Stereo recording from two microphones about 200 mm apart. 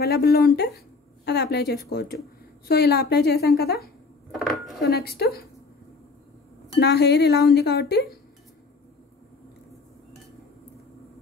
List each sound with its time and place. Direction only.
0.0 s a woman's voice: 50° left (ahead or behind)
4.3 s dishes: centre (ahead or behind)
4.8 s a woman's voice: 50° left (ahead or behind)
6.8 s speech: 55° left (ahead or behind)